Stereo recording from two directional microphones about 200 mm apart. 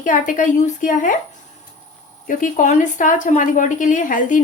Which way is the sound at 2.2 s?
40° left (ahead or behind).